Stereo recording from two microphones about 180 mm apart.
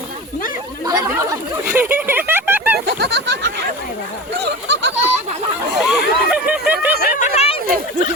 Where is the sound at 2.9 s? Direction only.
65° right (ahead or behind).